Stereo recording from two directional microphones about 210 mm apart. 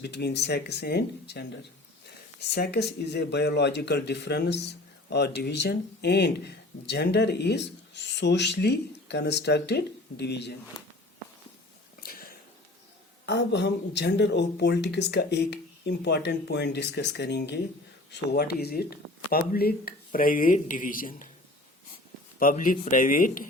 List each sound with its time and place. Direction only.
0.0 s speech: 50° left (ahead or behind)
11.9 s a sound: 45° left (ahead or behind)
13.2 s speech: 55° left (ahead or behind)
22.4 s speech: 40° left (ahead or behind)